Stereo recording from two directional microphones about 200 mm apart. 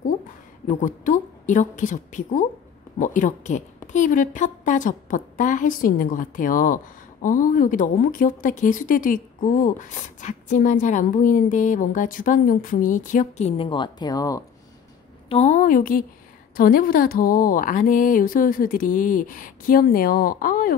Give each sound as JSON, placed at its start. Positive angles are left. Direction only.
{"t": 0.7, "sound": "a woman's voice", "side_deg": 40}
{"t": 15.2, "sound": "a woman's voice", "side_deg": 35}